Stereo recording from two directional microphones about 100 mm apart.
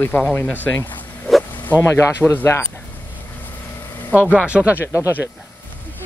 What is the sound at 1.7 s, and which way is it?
Speech, 25° left (ahead or behind).